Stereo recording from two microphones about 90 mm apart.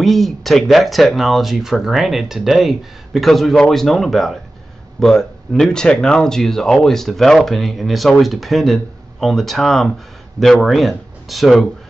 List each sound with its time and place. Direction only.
0.0 s speech: centre (ahead or behind)